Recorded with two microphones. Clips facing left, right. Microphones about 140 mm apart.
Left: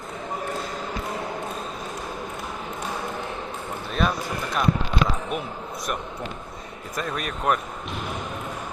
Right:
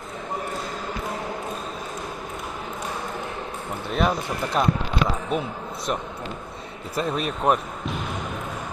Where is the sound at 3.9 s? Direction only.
20° right (ahead or behind).